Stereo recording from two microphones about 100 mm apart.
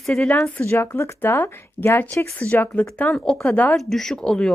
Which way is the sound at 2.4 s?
15° left (ahead or behind).